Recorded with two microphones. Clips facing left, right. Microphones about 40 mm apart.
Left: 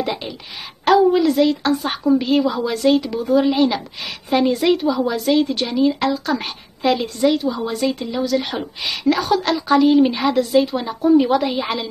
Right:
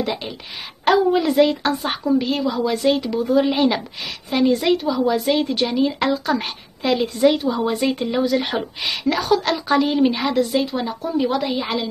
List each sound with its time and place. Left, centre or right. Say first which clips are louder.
0.0 s a woman's voice: left 1 dB; centre
1.2 s a woman's voice: even; centre
2.0 s speech: left 4 dB; centre
3.4 s a woman's voice: left 1 dB; centre
4.3 s speech: left 1 dB; centre
5.1 s a woman's voice: left 2 dB; centre
9.0 s speech: left 2 dB; centre